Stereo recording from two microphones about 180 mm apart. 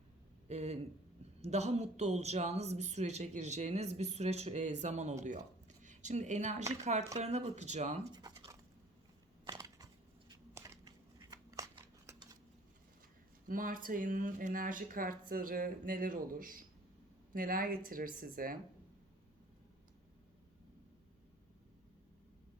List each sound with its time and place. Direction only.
0.4 s speech: 40° right (ahead or behind)
8.1 s a sound: 25° right (ahead or behind)
13.5 s speech: 50° right (ahead or behind)